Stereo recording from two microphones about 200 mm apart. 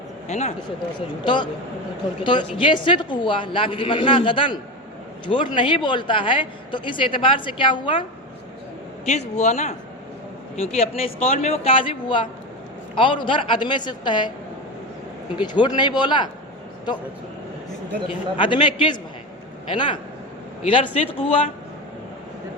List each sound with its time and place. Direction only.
0.3 s speech: 35° left (ahead or behind)
0.9 s a man's voice: 25° left (ahead or behind)
9.0 s a man's voice: 35° left (ahead or behind)
15.4 s a man's voice: 20° left (ahead or behind)
18.1 s a man's voice: 25° left (ahead or behind)